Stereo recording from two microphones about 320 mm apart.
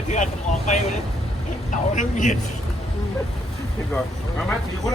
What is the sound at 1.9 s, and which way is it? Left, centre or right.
Speech, left.